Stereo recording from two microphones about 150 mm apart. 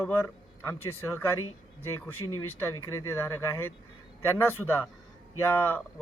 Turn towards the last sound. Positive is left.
turn(degrees=15)  # may be behind; listen again after turning